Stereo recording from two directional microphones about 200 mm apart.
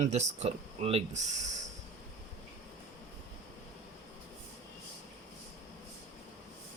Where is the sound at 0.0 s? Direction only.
35° right (ahead or behind).